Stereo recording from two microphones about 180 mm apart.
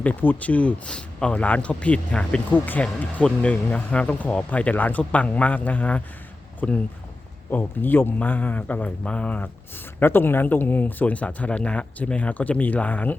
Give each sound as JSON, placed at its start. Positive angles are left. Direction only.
{"t": 0.0, "sound": "speech", "side_deg": 10}